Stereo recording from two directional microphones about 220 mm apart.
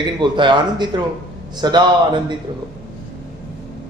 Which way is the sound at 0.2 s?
20° right (ahead or behind).